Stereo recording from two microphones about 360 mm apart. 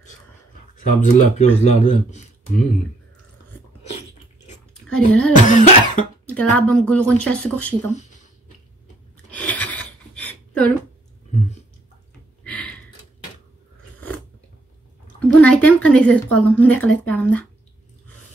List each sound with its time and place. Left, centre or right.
1.0 s speech: centre
4.8 s speech: centre
5.5 s speech: left
6.2 s a woman's voice: centre
9.3 s a sound: centre
12.4 s a sound: centre
13.9 s biting: centre
15.1 s a woman's voice: centre